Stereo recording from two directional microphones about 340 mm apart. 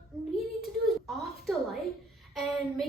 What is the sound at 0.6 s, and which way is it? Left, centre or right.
A woman's voice, centre.